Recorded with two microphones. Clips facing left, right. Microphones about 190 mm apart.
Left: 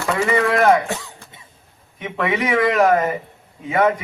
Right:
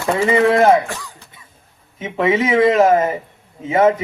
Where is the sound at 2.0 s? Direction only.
25° right (ahead or behind).